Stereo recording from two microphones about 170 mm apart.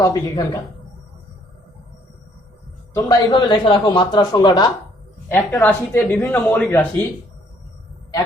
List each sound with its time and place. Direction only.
0.0 s a man's voice: 20° left (ahead or behind)
2.9 s a man's voice: 25° left (ahead or behind)
5.3 s speech: 10° left (ahead or behind)